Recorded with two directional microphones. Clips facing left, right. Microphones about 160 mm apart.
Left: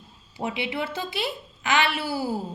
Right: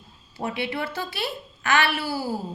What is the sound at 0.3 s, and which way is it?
A woman's voice, 15° left (ahead or behind).